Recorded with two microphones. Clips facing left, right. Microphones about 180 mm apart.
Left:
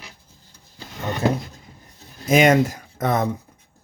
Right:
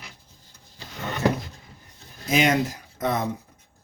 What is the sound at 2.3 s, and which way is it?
Speech, 50° left (ahead or behind).